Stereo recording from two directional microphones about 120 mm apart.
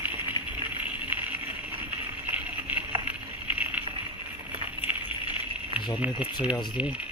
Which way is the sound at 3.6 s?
15° right (ahead or behind).